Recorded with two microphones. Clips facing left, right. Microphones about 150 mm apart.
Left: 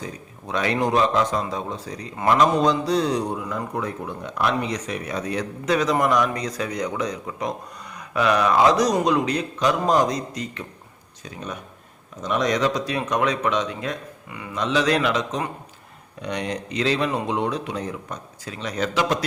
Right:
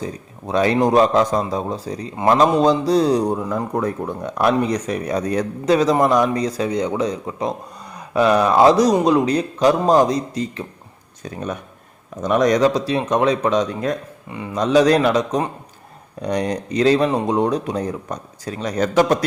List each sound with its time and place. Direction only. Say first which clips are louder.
0.0 s speech: right 6 dB; 35° right (ahead or behind)
11.2 s speech: right 6 dB; 50° right (ahead or behind)